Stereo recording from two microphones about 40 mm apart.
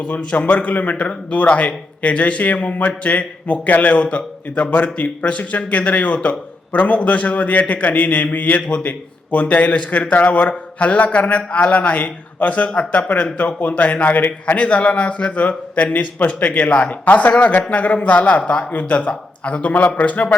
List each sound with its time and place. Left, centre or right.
0.0 s a man's voice: left